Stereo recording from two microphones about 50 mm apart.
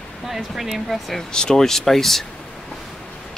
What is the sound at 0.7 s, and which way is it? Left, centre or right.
Speech, centre.